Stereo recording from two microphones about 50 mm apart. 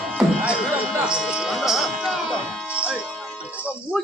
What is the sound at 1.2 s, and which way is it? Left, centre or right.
Speech, centre.